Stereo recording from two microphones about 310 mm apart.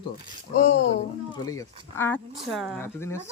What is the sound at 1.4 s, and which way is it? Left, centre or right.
Speech, centre.